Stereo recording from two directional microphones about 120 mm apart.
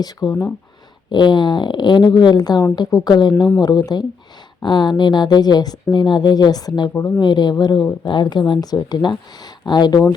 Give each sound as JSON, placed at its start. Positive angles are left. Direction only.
{"t": 0.0, "sound": "speech", "side_deg": 35}